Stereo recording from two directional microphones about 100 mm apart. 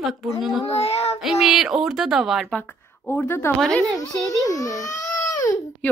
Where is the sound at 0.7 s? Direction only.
90° left.